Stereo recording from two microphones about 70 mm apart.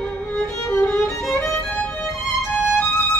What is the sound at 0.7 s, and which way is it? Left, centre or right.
Music, left.